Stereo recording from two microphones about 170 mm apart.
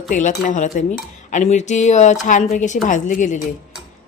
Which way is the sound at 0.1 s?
50° left (ahead or behind).